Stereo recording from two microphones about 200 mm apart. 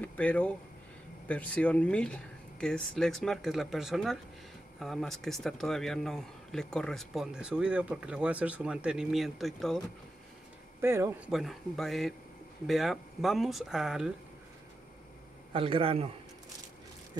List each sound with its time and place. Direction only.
0.0 s a man's voice: 10° left (ahead or behind)
10.8 s a man's voice: 10° right (ahead or behind)
15.5 s a man's voice: 25° right (ahead or behind)